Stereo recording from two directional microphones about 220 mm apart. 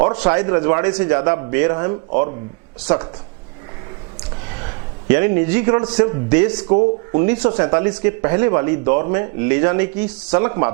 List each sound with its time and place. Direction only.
0.0 s speech: 15° right (ahead or behind)
4.6 s a man's voice: 15° right (ahead or behind)
6.7 s speech: 30° right (ahead or behind)
7.1 s speech: 15° right (ahead or behind)